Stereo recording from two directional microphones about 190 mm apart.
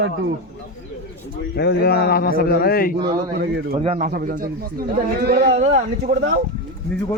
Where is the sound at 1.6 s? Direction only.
60° left (ahead or behind).